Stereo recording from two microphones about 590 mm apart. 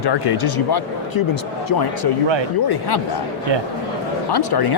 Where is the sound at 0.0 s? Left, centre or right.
Left.